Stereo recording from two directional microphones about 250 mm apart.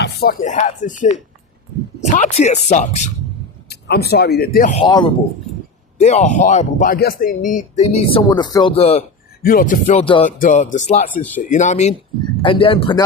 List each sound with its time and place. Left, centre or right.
0.0 s speech: left
3.7 s speech: left
4.8 s speech: centre
8.3 s speech: centre
9.4 s speech: left